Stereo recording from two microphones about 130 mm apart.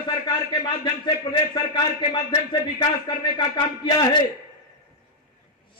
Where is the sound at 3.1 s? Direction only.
40° left (ahead or behind).